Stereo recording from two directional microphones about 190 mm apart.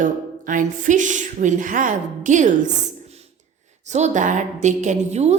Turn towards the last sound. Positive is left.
turn(degrees=-35)  # may be behind; listen again after turning